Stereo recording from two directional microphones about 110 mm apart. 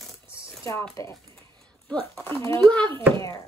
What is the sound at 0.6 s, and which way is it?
Speech, 25° left (ahead or behind).